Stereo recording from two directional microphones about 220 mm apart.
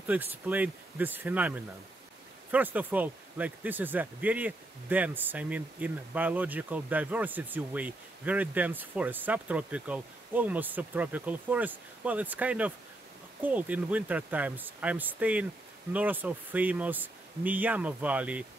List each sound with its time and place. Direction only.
0.0 s speech: 10° right (ahead or behind)